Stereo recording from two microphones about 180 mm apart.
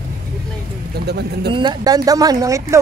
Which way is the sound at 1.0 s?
65° right (ahead or behind).